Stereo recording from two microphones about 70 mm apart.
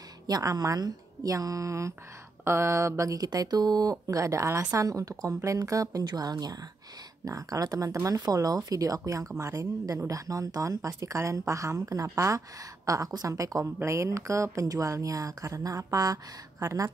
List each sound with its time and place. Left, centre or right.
0.3 s speech: right
6.0 s speech: right
7.2 s speech: right
13.7 s speech: right